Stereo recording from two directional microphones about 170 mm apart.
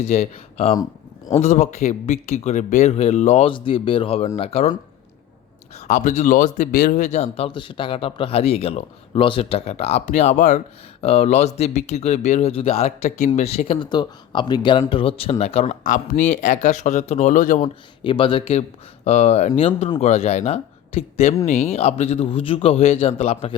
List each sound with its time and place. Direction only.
0.0 s speech: 40° left (ahead or behind)
0.8 s a sound: 20° left (ahead or behind)
1.4 s speech: 40° left (ahead or behind)
3.5 s speech: 30° left (ahead or behind)
5.7 s speech: 45° left (ahead or behind)
18.0 s speech: 30° left (ahead or behind)